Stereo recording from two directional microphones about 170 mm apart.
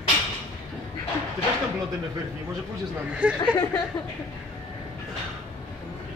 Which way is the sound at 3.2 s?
10° right (ahead or behind).